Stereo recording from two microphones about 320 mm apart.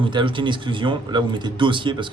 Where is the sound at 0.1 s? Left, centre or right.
Centre.